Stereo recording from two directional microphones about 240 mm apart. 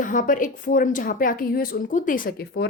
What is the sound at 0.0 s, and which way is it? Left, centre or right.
A woman's voice, left.